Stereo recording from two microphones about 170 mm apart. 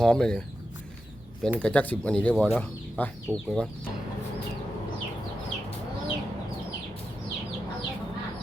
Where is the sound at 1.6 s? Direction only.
10° left (ahead or behind).